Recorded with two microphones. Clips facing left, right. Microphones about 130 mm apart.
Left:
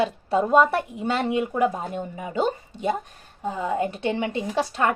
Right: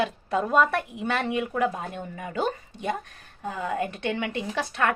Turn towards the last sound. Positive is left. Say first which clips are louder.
# left 3 dB
turn(degrees=25)  # may be behind; listen again after turning